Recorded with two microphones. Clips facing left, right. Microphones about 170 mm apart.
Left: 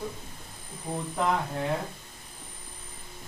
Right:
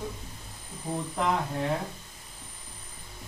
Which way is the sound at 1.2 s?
Centre (ahead or behind).